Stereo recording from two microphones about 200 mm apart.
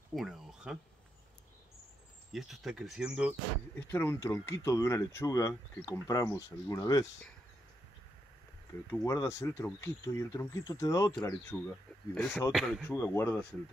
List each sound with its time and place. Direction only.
0.1 s a sound: centre (ahead or behind)
2.3 s speech: centre (ahead or behind)
3.9 s speech: 10° left (ahead or behind)
8.9 s speech: 15° left (ahead or behind)
12.9 s speech: 15° left (ahead or behind)